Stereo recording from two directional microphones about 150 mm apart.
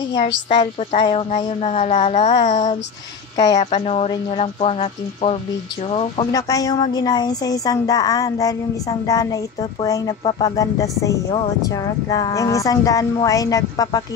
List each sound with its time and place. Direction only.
0.1 s speech: 35° left (ahead or behind)
6.3 s a woman's voice: 25° left (ahead or behind)